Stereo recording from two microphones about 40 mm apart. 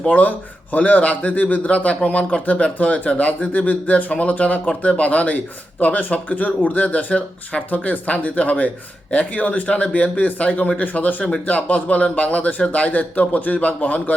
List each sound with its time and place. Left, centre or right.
0.1 s a man's voice: left
1.6 s speech: left
2.7 s a man's voice: left